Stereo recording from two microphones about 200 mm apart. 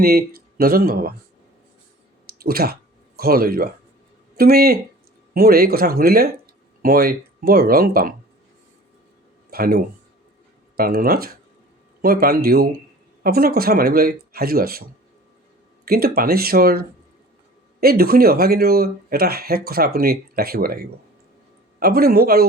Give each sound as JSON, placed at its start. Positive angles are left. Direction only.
{"t": 0.0, "sound": "speech", "side_deg": -50}
{"t": 2.2, "sound": "a sound", "side_deg": -50}
{"t": 3.2, "sound": "speech", "side_deg": -50}
{"t": 9.5, "sound": "speech", "side_deg": -50}